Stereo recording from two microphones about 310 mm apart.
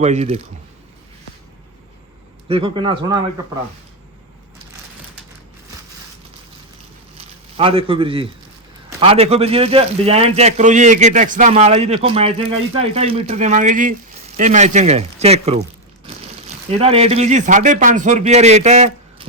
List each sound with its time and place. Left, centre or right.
0.0 s a man's voice: right
2.5 s a man's voice: centre
7.5 s a man's voice: centre
16.6 s a man's voice: centre